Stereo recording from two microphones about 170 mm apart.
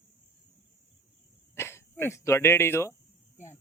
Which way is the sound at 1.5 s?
15° left (ahead or behind).